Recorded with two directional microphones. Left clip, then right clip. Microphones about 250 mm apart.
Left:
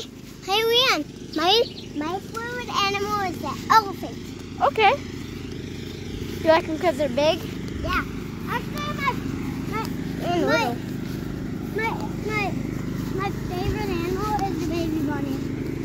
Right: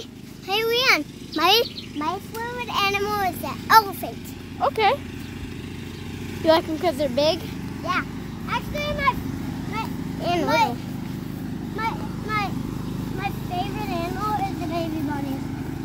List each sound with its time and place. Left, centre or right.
0.5 s a sound: centre
0.9 s a child's voice: centre
4.6 s speech: centre
6.4 s a child's voice: centre
8.5 s vehicle: right
10.2 s a child's voice: centre
11.7 s vehicle: right
13.2 s a sound: centre